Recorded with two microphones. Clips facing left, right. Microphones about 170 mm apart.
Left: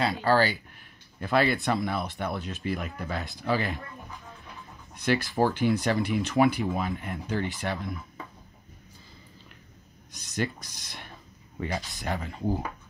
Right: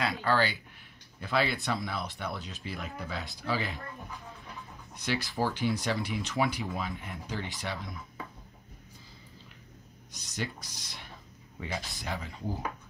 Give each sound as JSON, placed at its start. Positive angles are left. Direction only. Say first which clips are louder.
{"t": 0.0, "sound": "speech", "louder": "left 5 dB", "side_deg": 35}
{"t": 1.2, "sound": "speech", "louder": "left 5 dB", "side_deg": 50}
{"t": 4.9, "sound": "speech", "louder": "left 7 dB", "side_deg": 55}
{"t": 10.1, "sound": "speech", "louder": "left 6 dB", "side_deg": 55}